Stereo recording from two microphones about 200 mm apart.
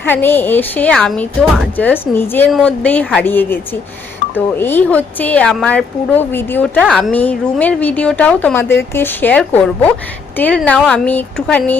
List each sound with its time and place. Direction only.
0.0 s a woman's voice: 10° left (ahead or behind)